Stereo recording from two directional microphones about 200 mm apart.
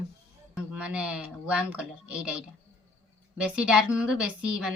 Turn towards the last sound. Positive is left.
turn(degrees=-5)  # may be behind; listen again after turning